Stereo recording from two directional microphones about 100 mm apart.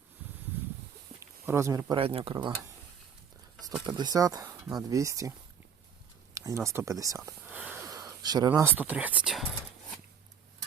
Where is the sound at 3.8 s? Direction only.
45° right (ahead or behind).